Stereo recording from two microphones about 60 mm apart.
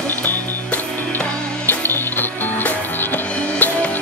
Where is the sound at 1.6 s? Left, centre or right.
Left.